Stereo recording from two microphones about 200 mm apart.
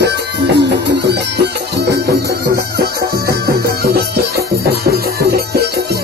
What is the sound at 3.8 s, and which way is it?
Music, 50° right (ahead or behind).